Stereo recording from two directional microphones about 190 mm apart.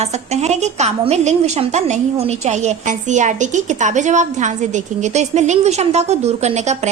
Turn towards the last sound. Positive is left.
turn(degrees=-35)  # may be behind; listen again after turning